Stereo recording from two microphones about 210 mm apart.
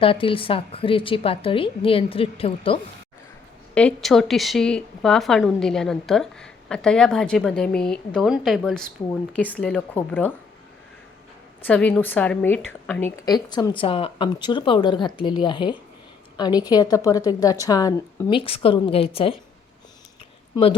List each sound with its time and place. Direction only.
0.0 s a woman's voice: 25° left (ahead or behind)
3.8 s a woman's voice: 5° left (ahead or behind)
11.6 s a woman's voice: 5° left (ahead or behind); by 19.4 s 25° left (ahead or behind)